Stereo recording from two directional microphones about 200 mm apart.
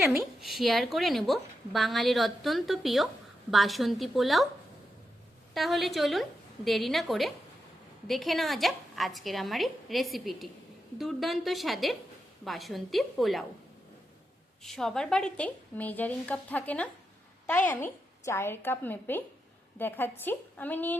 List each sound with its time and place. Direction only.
0.3 s a woman's voice: centre (ahead or behind)
5.5 s a woman's voice: centre (ahead or behind)
14.6 s a woman's voice: centre (ahead or behind)